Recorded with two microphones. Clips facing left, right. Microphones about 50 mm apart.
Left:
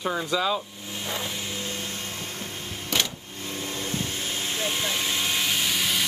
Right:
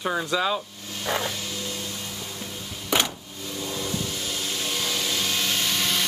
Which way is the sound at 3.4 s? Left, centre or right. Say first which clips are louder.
Right 1 dB; left.